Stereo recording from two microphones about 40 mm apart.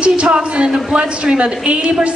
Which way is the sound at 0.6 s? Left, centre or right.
Centre.